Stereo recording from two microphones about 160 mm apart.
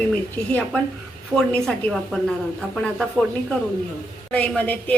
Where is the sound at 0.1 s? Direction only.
5° left (ahead or behind).